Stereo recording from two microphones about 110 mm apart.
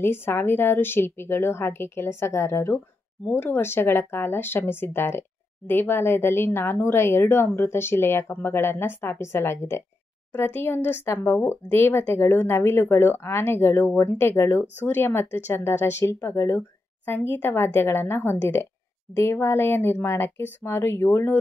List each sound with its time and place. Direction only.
0.0 s speech: 20° left (ahead or behind)